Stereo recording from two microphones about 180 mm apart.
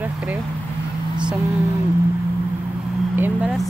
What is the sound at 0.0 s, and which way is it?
Speech, 10° right (ahead or behind).